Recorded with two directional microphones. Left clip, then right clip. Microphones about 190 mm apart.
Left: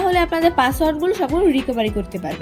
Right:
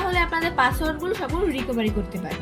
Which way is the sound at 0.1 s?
50° left (ahead or behind).